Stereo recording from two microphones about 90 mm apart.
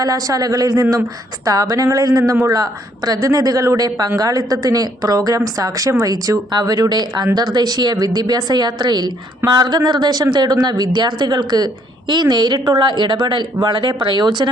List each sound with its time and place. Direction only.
0.0 s a woman's voice: 45° right (ahead or behind)